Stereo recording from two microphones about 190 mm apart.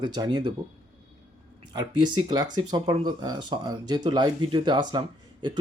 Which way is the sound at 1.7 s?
20° right (ahead or behind).